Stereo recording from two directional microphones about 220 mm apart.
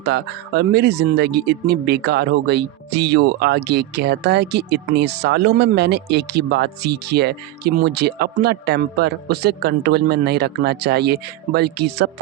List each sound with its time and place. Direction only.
0.0 s speech: 50° right (ahead or behind)